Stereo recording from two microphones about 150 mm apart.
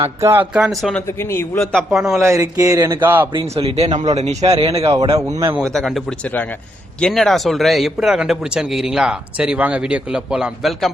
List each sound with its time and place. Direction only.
0.0 s speech: 20° right (ahead or behind)
0.5 s a man's voice: centre (ahead or behind)
1.0 s speech: 15° left (ahead or behind)
1.7 s a man's voice: centre (ahead or behind)
2.2 s speech: 20° right (ahead or behind)
3.4 s a man's voice: 40° right (ahead or behind)
5.5 s a man's voice: centre (ahead or behind)